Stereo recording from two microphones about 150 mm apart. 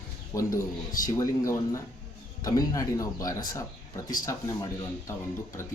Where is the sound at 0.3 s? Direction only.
20° left (ahead or behind).